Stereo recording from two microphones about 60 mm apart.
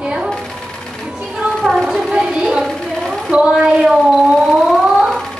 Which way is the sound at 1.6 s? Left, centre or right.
Centre.